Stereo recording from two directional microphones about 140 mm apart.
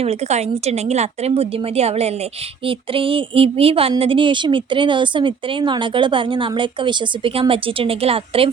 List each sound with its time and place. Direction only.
0.0 s speech: 50° right (ahead or behind)